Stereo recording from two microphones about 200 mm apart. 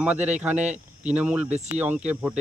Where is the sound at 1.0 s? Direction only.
5° right (ahead or behind).